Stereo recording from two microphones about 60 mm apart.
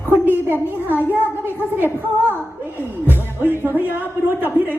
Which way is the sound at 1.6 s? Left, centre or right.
Right.